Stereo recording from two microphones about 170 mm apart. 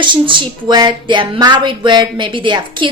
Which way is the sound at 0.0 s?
30° right (ahead or behind).